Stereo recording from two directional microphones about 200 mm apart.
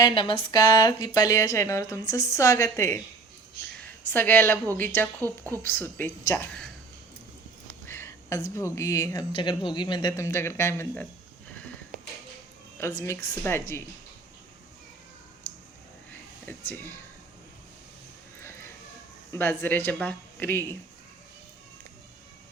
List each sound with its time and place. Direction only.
0.0 s speech: 25° left (ahead or behind)
4.0 s speech: 10° left (ahead or behind)
7.9 s speech: 15° left (ahead or behind)
13.0 s speech: 15° left (ahead or behind)
16.5 s speech: 10° left (ahead or behind)
18.3 s a sound: 15° left (ahead or behind)
19.3 s speech: 10° left (ahead or behind)